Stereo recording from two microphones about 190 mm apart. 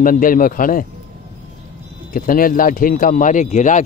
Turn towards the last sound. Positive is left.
turn(degrees=40)  # may be behind; listen again after turning